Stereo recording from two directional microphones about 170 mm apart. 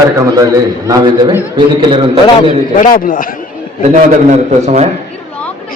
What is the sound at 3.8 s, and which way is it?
A man's voice, 40° right (ahead or behind).